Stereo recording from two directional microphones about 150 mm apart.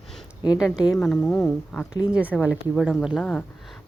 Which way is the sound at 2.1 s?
10° right (ahead or behind).